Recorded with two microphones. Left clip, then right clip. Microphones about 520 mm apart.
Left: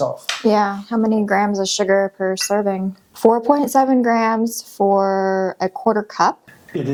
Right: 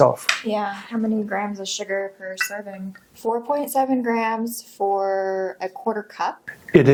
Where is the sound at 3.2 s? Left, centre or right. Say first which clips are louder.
Left 8 dB; left.